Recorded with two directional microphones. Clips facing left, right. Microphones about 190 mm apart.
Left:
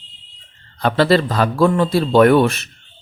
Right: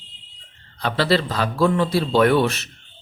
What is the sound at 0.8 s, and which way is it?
Speech, 50° left (ahead or behind).